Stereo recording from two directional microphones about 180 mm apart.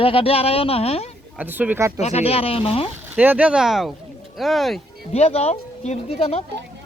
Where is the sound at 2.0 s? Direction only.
35° left (ahead or behind).